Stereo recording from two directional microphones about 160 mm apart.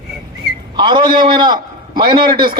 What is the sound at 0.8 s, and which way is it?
Speech, 30° right (ahead or behind).